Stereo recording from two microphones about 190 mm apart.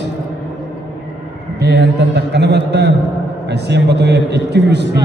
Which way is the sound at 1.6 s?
60° right (ahead or behind).